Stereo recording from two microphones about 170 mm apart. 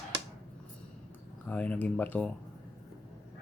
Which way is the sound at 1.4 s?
10° left (ahead or behind).